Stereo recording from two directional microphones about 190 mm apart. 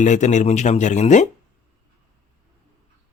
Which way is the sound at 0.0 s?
40° left (ahead or behind).